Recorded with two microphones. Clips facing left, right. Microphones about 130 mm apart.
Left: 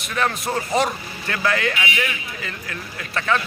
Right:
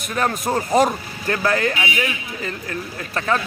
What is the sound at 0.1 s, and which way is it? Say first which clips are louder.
Speech: right 2 dB; 40° right (ahead or behind).